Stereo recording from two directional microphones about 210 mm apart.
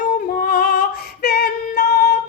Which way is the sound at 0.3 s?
45° left (ahead or behind).